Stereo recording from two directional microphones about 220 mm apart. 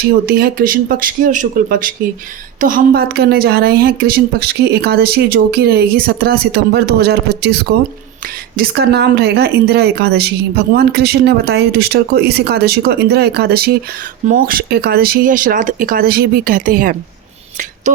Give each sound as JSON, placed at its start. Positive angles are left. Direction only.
{"t": 0.0, "sound": "speech", "side_deg": -45}